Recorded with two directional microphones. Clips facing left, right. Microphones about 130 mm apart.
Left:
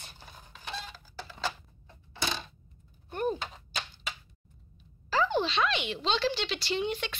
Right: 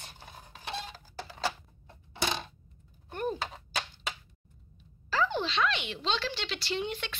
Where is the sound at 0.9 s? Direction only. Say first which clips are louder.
Right 1 dB; 40° right (ahead or behind).